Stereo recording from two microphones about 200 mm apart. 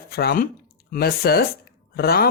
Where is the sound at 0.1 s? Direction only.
50° left (ahead or behind).